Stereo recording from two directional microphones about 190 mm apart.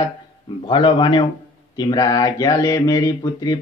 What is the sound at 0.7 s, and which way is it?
Mantra, 25° left (ahead or behind).